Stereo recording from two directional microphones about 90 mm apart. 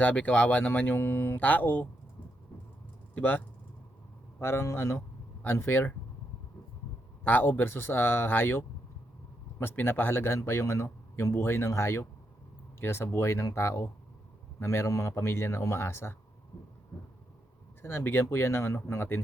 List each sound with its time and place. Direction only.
0.0 s speech: 20° left (ahead or behind)
3.2 s speech: 20° left (ahead or behind)
7.3 s speech: 20° left (ahead or behind)
17.8 s speech: 25° left (ahead or behind)